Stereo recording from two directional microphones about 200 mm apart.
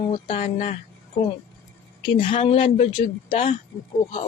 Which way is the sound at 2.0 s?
25° left (ahead or behind).